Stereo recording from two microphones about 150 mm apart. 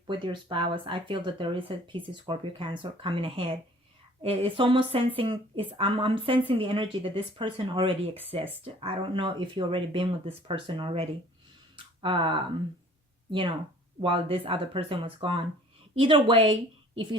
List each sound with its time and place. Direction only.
0.1 s speech: 35° right (ahead or behind)
14.0 s speech: 35° right (ahead or behind)